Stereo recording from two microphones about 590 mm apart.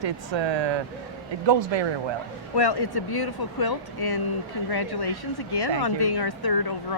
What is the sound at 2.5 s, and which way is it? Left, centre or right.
A woman's voice, left.